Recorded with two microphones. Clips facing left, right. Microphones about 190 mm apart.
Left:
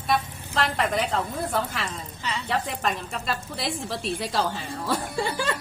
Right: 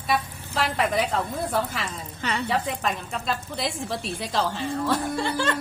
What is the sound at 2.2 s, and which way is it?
Speech, 60° right (ahead or behind).